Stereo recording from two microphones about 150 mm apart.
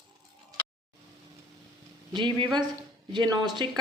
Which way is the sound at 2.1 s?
35° right (ahead or behind).